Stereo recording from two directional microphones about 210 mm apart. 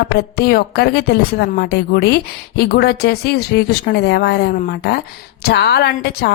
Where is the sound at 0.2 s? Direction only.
50° left (ahead or behind).